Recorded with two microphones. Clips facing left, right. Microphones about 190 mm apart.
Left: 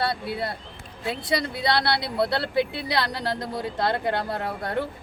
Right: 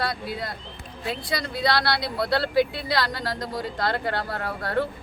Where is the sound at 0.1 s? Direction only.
30° left (ahead or behind).